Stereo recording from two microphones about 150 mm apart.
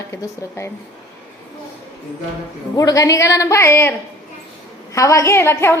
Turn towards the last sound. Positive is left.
turn(degrees=15)  # may be behind; listen again after turning